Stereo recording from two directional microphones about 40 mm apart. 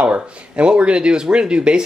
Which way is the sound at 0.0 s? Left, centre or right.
Right.